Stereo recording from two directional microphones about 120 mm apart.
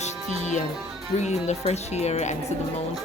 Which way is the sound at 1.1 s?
70° left (ahead or behind).